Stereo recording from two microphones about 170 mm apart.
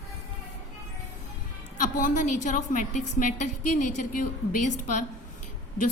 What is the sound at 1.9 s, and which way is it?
A woman's voice, 50° left (ahead or behind).